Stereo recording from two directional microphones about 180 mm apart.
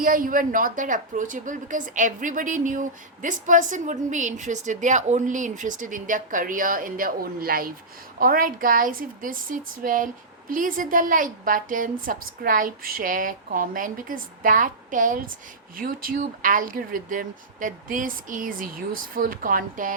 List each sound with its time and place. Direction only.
0.0 s a woman's voice: 50° right (ahead or behind)